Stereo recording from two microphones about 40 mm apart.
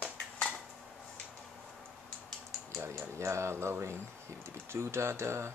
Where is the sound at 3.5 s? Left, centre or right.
Right.